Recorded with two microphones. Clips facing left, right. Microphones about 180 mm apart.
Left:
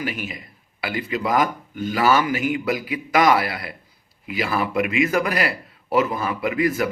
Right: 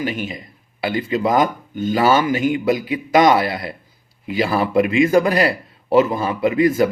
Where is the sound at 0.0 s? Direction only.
25° right (ahead or behind).